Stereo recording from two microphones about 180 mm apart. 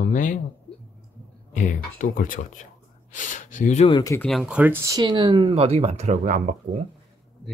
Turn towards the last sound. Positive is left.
turn(degrees=-45)  # may be behind; listen again after turning